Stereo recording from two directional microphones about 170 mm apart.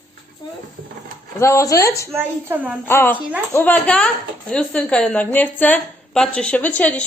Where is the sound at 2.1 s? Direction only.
10° right (ahead or behind).